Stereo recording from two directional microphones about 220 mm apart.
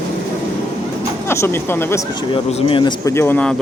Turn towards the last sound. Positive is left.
turn(degrees=5)  # may be behind; listen again after turning